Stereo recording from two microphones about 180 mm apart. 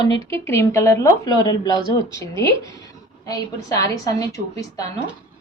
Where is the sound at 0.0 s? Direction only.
20° left (ahead or behind).